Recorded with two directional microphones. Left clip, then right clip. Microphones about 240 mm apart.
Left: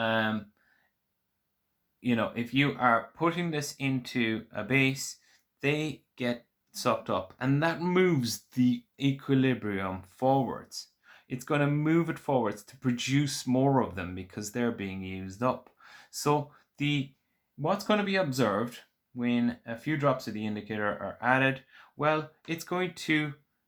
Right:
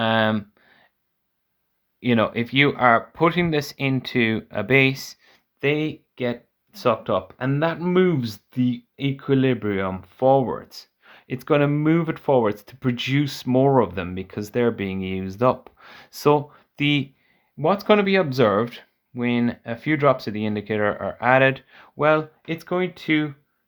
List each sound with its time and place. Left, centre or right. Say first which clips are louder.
0.0 s speech: right 8 dB; right
2.0 s speech: right 9 dB; right